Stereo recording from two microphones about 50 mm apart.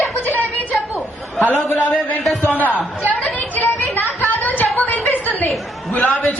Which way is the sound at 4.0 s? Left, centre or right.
Left.